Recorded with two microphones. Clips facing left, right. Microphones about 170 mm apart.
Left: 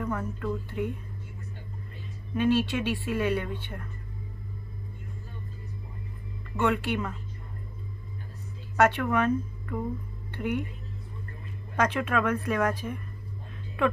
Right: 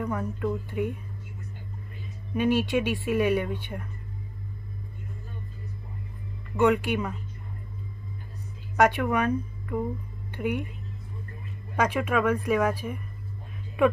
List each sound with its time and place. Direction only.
0.0 s speech: 10° right (ahead or behind)
2.3 s speech: 15° right (ahead or behind)
6.5 s speech: 15° right (ahead or behind)
8.7 s speech: 10° right (ahead or behind)
11.7 s speech: 10° right (ahead or behind)